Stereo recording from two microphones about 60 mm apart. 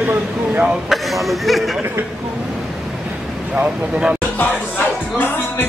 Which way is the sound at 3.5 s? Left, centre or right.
Centre.